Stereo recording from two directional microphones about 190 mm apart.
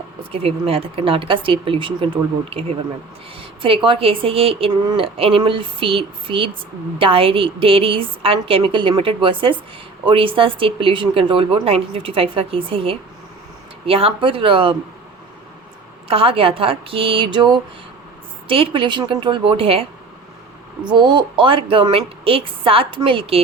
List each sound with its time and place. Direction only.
0.2 s a woman's voice: 30° right (ahead or behind)
3.8 s a woman's voice: 30° right (ahead or behind)
16.0 s a woman's voice: 30° right (ahead or behind)